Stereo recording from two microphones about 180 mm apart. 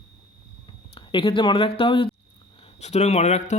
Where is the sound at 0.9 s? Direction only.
25° left (ahead or behind).